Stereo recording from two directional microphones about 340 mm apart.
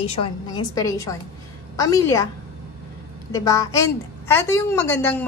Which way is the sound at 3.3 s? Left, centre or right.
Centre.